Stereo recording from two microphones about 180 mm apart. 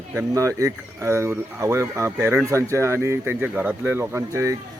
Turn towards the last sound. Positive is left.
turn(degrees=-15)  # may be behind; listen again after turning